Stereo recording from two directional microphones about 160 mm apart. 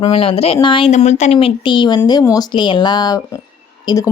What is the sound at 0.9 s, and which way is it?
Speech, 45° left (ahead or behind).